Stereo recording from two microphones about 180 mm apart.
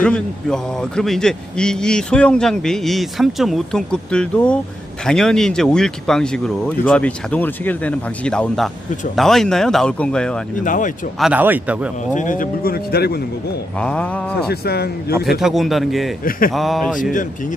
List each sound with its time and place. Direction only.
0.0 s a man's voice: 5° left (ahead or behind)
10.6 s speech: 45° left (ahead or behind)
11.2 s speech: 10° right (ahead or behind)
12.1 s speech: 45° left (ahead or behind); by 13.2 s 60° left (ahead or behind)
13.7 s a sound: 5° left (ahead or behind)
14.5 s speech: 60° left (ahead or behind)
15.3 s a man's voice: centre (ahead or behind)
17.0 s speech: 45° left (ahead or behind)